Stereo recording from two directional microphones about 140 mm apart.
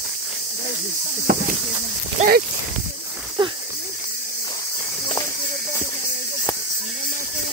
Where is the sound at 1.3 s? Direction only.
90° right.